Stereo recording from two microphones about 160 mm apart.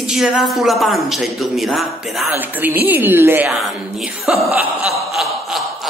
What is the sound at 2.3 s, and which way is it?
A woman's voice, 10° right (ahead or behind).